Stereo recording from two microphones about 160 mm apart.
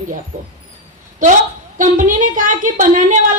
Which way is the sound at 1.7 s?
55° right (ahead or behind).